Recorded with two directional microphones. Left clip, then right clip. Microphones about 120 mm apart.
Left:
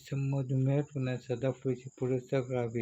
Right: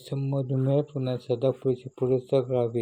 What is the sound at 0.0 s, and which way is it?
Speech, 20° right (ahead or behind).